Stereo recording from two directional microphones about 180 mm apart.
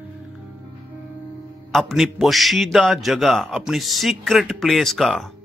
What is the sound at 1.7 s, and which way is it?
A man's voice, centre (ahead or behind).